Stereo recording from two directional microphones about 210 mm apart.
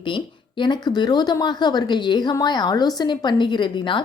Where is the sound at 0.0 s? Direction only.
20° left (ahead or behind).